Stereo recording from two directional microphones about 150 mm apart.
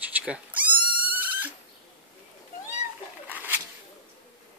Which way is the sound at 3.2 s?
15° right (ahead or behind).